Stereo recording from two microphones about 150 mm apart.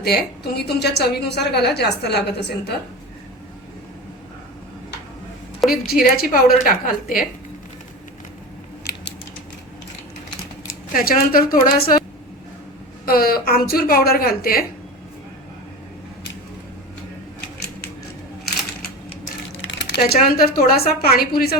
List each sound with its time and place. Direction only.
0.0 s a woman's voice: 90° left
5.9 s a woman's voice: 80° left
8.9 s a sound: 80° left
10.9 s a woman's voice: 70° left (ahead or behind)
13.1 s a woman's voice: 85° left
20.0 s a woman's voice: 85° left